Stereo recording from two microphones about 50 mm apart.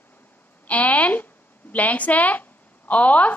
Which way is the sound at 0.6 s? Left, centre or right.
Left.